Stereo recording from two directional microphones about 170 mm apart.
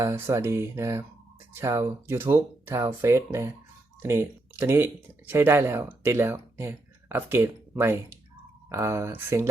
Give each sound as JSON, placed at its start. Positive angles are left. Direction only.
{"t": 0.0, "sound": "speech", "side_deg": -15}